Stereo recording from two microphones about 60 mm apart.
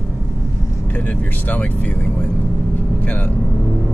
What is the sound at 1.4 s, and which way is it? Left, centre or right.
Speech, left.